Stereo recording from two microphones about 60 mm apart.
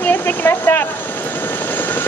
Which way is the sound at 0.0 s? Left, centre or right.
Left.